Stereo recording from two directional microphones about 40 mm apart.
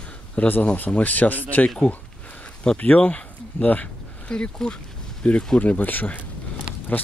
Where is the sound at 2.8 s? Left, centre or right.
Left.